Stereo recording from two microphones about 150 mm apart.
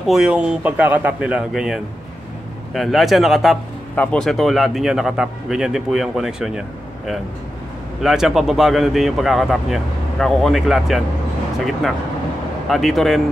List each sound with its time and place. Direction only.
0.0 s speech: 5° right (ahead or behind)
8.0 s speech: centre (ahead or behind)
12.6 s speech: centre (ahead or behind)